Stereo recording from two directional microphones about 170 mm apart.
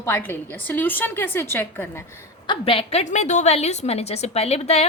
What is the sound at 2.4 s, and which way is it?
A woman's voice, 30° left (ahead or behind).